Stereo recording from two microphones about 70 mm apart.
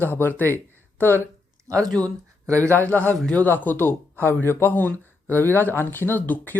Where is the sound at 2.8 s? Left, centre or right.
Left.